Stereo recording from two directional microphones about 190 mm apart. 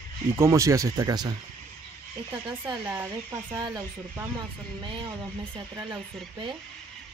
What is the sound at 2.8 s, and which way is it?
Speech, 10° right (ahead or behind).